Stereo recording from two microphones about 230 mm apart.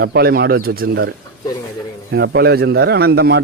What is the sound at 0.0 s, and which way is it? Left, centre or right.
Speech, right.